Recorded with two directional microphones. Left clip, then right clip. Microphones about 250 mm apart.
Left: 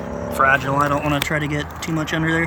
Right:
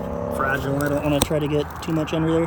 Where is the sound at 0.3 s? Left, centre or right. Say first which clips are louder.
Left 8 dB; left.